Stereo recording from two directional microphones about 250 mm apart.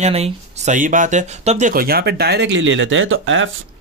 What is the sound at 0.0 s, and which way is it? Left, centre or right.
Speech, right.